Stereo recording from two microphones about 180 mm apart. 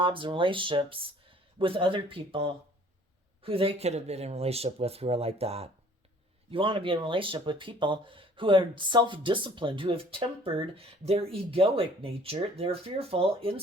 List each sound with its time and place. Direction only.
0.0 s speech: 30° right (ahead or behind)